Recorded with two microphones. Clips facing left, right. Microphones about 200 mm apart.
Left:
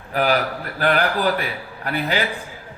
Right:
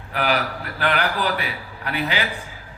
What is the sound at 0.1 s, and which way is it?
A man's voice, 40° left (ahead or behind).